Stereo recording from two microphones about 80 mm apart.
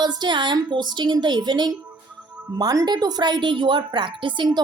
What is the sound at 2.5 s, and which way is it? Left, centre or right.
A woman's voice, right.